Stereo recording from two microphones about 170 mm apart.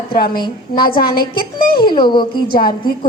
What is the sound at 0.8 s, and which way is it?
Speech, 60° left (ahead or behind).